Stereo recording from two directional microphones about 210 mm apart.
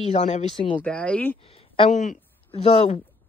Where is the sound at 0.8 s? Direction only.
5° left (ahead or behind).